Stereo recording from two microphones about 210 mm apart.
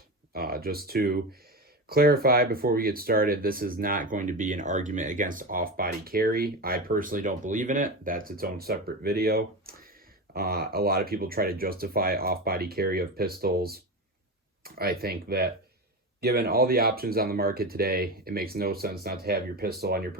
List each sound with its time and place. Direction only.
0.3 s speech: 45° right (ahead or behind)